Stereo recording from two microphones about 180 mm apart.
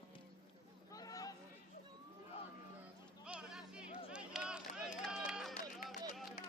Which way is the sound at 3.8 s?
30° left (ahead or behind).